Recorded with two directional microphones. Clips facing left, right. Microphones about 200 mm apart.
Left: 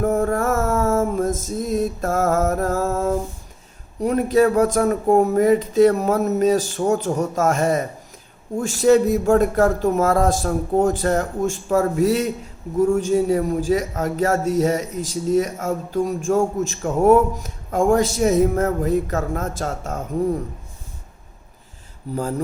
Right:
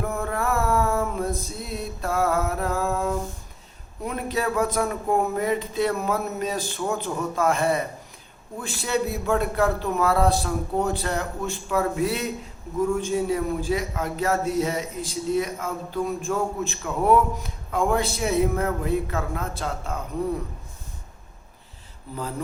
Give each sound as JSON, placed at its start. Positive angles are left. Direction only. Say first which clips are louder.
{"t": 0.0, "sound": "music", "louder": "left 8 dB", "side_deg": 45}
{"t": 4.0, "sound": "speech", "louder": "left 10 dB", "side_deg": 45}
{"t": 22.1, "sound": "speech", "louder": "left 7 dB", "side_deg": 45}